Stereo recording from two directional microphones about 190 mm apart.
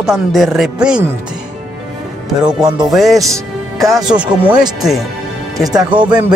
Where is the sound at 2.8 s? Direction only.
Centre (ahead or behind).